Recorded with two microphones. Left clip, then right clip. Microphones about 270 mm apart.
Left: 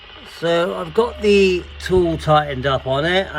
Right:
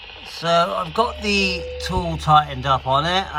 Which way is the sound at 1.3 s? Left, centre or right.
Right.